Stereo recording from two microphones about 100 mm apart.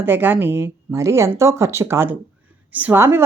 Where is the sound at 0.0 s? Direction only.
20° right (ahead or behind).